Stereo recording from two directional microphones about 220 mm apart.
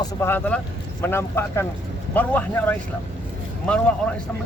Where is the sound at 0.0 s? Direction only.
10° left (ahead or behind).